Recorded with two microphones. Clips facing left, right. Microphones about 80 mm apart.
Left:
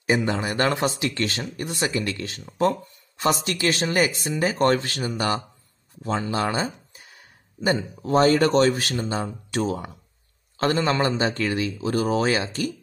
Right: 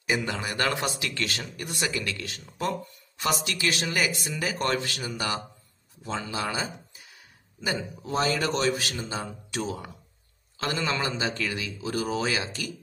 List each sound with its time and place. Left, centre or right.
0.0 s a man's voice: left